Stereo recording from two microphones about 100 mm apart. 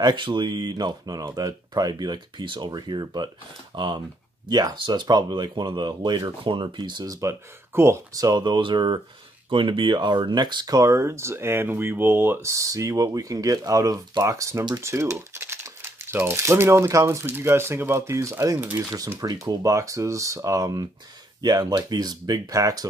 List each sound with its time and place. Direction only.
0.0 s speech: 50° right (ahead or behind)
7.2 s speech: 30° right (ahead or behind)